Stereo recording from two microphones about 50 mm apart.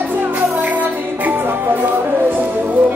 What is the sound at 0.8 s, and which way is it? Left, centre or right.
Music, right.